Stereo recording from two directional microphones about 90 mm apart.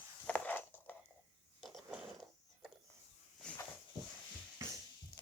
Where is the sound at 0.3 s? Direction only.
15° left (ahead or behind).